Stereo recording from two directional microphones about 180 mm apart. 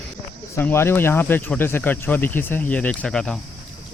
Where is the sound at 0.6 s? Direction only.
15° left (ahead or behind).